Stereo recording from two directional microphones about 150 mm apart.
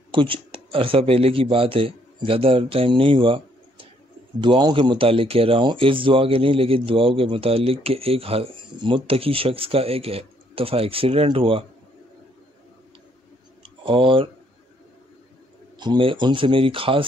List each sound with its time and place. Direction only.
0.1 s speech: 35° right (ahead or behind)
13.6 s a sound: 35° right (ahead or behind)
15.8 s speech: 30° right (ahead or behind)